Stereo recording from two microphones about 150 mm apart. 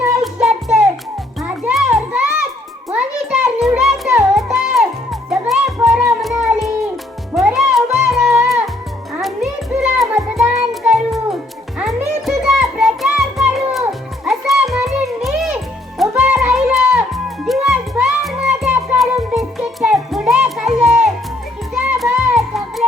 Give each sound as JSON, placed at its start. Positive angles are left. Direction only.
{"t": 0.2, "sound": "music", "side_deg": 0}
{"t": 1.5, "sound": "children playing", "side_deg": -5}
{"t": 2.9, "sound": "music", "side_deg": -10}